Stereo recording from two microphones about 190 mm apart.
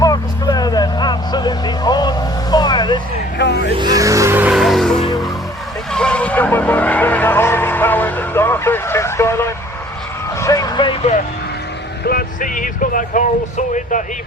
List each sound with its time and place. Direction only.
0.0 s vehicle: 20° left (ahead or behind)
3.8 s music: 20° right (ahead or behind); by 5.0 s centre (ahead or behind)
5.9 s vehicle: 5° left (ahead or behind); by 11.0 s 25° left (ahead or behind)
12.0 s a sound: 50° left (ahead or behind)